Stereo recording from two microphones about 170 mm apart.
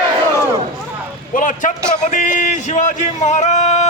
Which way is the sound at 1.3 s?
50° left (ahead or behind).